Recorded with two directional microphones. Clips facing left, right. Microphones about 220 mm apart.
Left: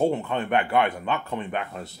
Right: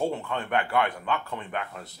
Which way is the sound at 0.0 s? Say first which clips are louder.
Left 5 dB; 20° left (ahead or behind).